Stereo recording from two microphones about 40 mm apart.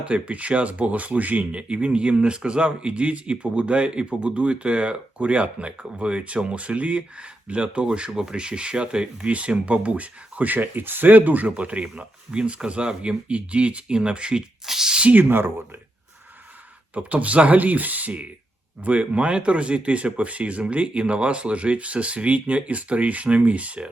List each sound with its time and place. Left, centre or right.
0.0 s speech: right
1.6 s a man's voice: right
14.7 s a sound: centre
15.1 s speech: right
16.9 s speech: right